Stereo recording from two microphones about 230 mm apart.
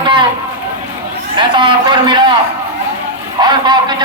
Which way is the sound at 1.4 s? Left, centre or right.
Centre.